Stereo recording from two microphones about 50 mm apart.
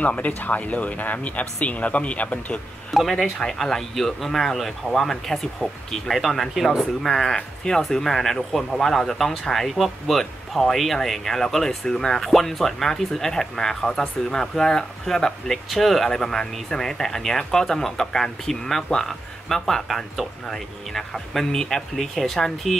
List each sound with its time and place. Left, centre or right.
0.0 s speech: left
2.9 s speech: centre
3.3 s speech: centre